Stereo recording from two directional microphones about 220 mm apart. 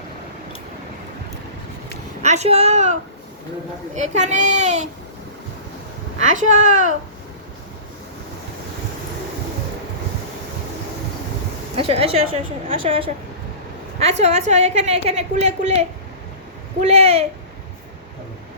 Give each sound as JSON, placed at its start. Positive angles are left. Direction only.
{"t": 2.2, "sound": "a child's voice", "side_deg": -30}
{"t": 6.1, "sound": "a child's voice", "side_deg": -35}
{"t": 11.8, "sound": "a woman's voice", "side_deg": -25}
{"t": 16.8, "sound": "a woman's voice", "side_deg": -30}